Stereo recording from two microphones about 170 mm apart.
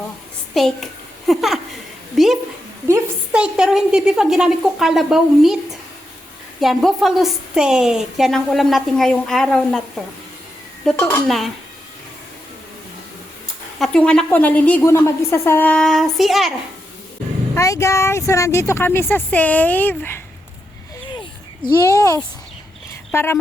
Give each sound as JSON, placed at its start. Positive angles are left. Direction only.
{"t": 0.5, "sound": "a woman's voice", "side_deg": 0}
{"t": 2.1, "sound": "a sound", "side_deg": 0}
{"t": 2.8, "sound": "a sound", "side_deg": -15}
{"t": 3.4, "sound": "a woman's voice", "side_deg": -5}
{"t": 6.6, "sound": "a woman's voice", "side_deg": 0}
{"t": 13.7, "sound": "speech", "side_deg": 5}
{"t": 17.5, "sound": "speech", "side_deg": 15}
{"t": 21.7, "sound": "speech", "side_deg": 15}
{"t": 22.9, "sound": "a sound", "side_deg": 15}